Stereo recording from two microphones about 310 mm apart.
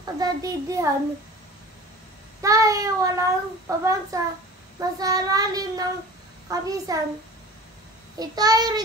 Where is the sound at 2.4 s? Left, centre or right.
Centre.